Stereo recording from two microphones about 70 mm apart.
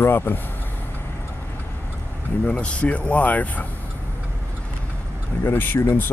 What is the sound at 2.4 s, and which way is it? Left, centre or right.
Speech, centre.